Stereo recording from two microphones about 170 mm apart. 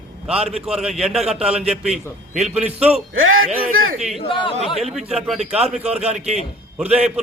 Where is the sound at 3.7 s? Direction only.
45° right (ahead or behind).